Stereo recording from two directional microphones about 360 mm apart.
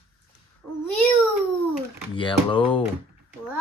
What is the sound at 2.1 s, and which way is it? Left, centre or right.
Speech, centre.